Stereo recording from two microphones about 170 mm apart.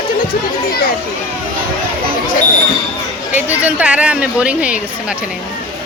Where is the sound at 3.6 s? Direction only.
10° right (ahead or behind).